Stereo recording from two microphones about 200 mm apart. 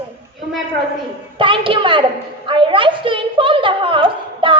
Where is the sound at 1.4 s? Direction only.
25° right (ahead or behind).